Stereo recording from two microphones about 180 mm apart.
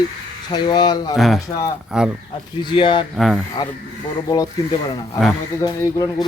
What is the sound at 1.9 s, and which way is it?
Speech, 5° right (ahead or behind).